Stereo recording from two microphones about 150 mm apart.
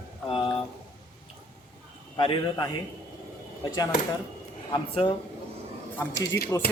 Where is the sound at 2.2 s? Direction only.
30° left (ahead or behind).